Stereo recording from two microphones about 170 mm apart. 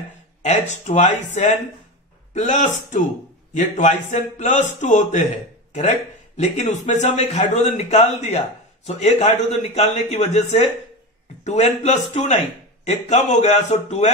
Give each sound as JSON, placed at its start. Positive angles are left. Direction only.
{"t": 0.4, "sound": "speech", "side_deg": 40}